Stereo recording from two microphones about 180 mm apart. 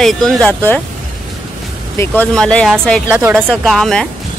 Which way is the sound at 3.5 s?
Centre (ahead or behind).